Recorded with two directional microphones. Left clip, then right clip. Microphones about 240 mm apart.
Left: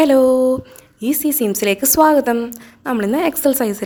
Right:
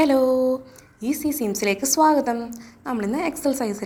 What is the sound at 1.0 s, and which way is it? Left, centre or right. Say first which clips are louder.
A woman's voice: left 6 dB; left.